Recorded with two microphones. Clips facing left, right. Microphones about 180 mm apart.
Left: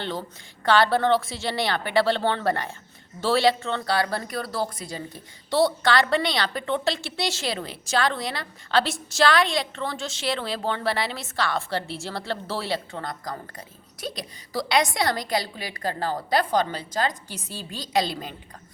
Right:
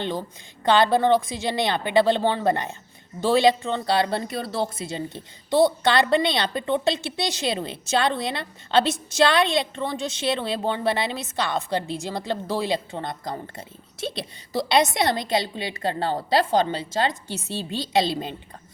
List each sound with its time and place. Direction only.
0.0 s a woman's voice: 15° right (ahead or behind)